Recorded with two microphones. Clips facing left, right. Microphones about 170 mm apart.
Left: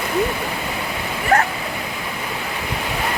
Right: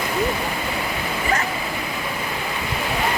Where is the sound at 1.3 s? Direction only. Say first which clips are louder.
Left 8 dB; 65° left (ahead or behind).